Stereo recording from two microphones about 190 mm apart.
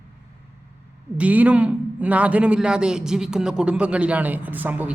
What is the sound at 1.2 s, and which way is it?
A man's voice, 5° right (ahead or behind).